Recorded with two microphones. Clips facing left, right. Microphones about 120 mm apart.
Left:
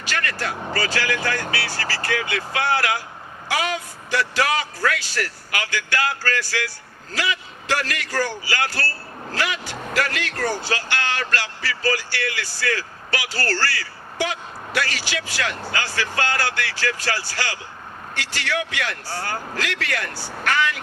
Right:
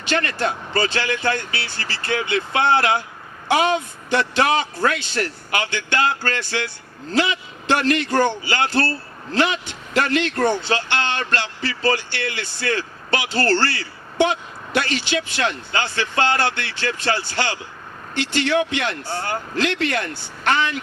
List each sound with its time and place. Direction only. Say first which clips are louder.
0.0 s a man's voice: right 5 dB; 25° right (ahead or behind)